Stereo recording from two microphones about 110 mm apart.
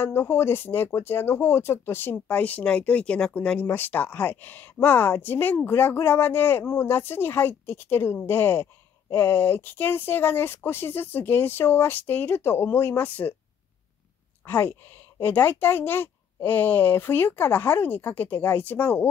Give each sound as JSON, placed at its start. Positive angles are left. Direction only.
{"t": 0.0, "sound": "speech", "side_deg": 20}
{"t": 14.4, "sound": "speech", "side_deg": 20}